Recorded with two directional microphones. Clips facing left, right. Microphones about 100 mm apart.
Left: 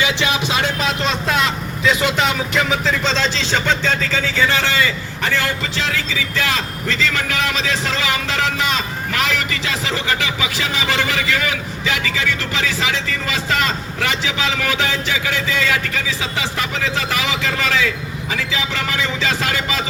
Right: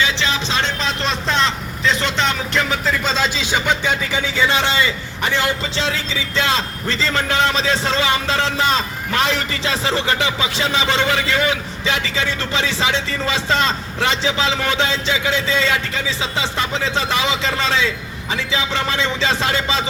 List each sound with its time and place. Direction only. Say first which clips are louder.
0.0 s speech: left 1 dB; 15° left (ahead or behind); by 19.8 s 25° right (ahead or behind)